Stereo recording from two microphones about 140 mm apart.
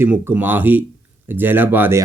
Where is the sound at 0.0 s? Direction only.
15° right (ahead or behind).